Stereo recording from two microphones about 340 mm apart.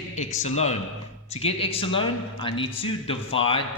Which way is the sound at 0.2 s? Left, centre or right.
Centre.